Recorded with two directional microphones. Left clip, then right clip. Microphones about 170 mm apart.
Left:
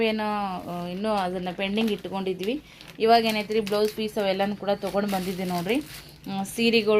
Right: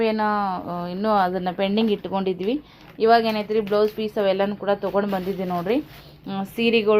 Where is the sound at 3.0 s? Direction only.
5° right (ahead or behind).